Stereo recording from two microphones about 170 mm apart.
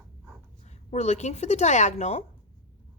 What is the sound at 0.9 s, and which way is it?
A woman's voice, 40° left (ahead or behind).